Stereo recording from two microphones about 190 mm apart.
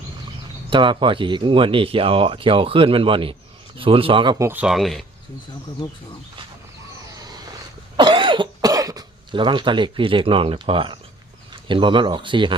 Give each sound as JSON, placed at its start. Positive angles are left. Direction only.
{"t": 0.7, "sound": "speech", "side_deg": -25}
{"t": 7.2, "sound": "a sound", "side_deg": -20}
{"t": 7.9, "sound": "cough", "side_deg": -25}
{"t": 11.5, "sound": "speech", "side_deg": -25}